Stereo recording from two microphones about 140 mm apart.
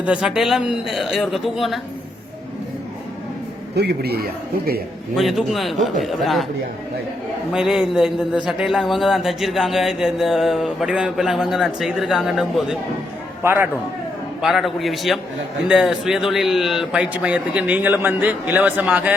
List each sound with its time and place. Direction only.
0.0 s speech: 5° right (ahead or behind)
4.2 s speech: 90° right
5.1 s speech: centre (ahead or behind)
7.5 s speech: centre (ahead or behind)
13.4 s a man's voice: 15° right (ahead or behind)
14.4 s a man's voice: centre (ahead or behind)